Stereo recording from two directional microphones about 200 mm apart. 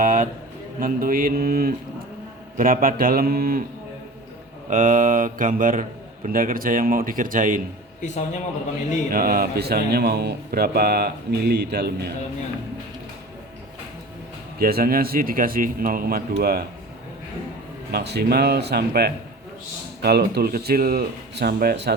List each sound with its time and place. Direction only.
0.0 s a sound: 40° right (ahead or behind)
0.8 s speech: 45° right (ahead or behind)
4.7 s speech: 40° right (ahead or behind)
9.0 s speech: 50° right (ahead or behind)
14.6 s speech: 50° right (ahead or behind)
17.9 s speech: 55° right (ahead or behind)